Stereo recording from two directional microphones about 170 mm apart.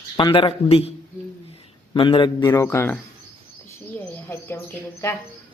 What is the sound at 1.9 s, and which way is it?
Speech, 30° left (ahead or behind).